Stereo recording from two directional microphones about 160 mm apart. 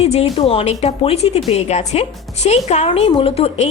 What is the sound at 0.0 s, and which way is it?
Speech, 40° left (ahead or behind).